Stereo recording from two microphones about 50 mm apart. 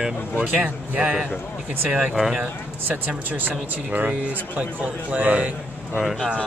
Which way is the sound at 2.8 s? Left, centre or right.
Right.